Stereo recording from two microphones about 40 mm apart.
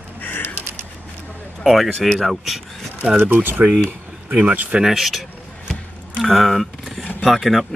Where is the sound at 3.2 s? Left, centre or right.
Right.